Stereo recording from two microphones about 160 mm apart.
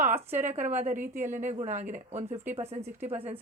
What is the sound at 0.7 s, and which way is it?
A woman's voice, 45° right (ahead or behind).